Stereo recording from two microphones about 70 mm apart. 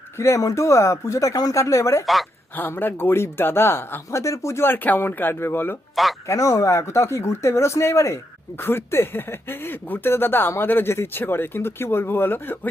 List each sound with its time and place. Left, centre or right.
0.2 s speech: left
2.6 s speech: left
4.2 s speech: left
6.2 s speech: left